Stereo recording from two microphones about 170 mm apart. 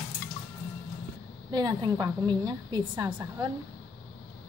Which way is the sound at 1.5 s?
25° right (ahead or behind).